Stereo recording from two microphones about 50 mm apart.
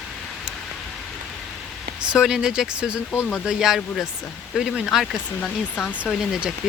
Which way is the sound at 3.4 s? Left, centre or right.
Centre.